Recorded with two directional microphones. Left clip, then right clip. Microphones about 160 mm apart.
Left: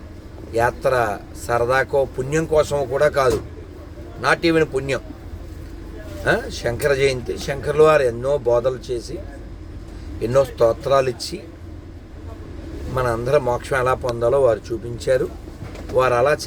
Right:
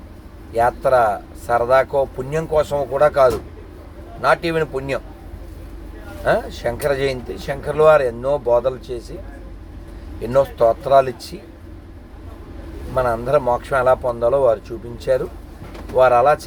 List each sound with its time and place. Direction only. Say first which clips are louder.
0.5 s speech: right 3 dB; 15° left (ahead or behind)
6.2 s speech: right 2 dB; 15° left (ahead or behind)
10.2 s speech: right 1 dB; 15° left (ahead or behind)
12.9 s speech: right 2 dB; 15° left (ahead or behind)